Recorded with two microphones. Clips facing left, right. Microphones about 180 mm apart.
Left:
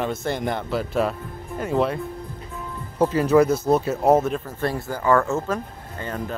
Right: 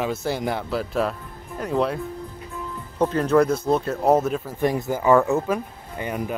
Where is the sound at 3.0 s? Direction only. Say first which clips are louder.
Left 1 dB; 5° left (ahead or behind).